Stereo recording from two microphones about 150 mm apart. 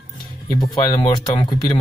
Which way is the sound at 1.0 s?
35° left (ahead or behind).